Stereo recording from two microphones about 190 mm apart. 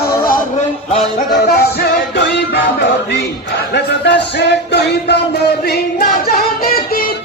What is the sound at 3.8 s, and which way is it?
Music, 65° left (ahead or behind).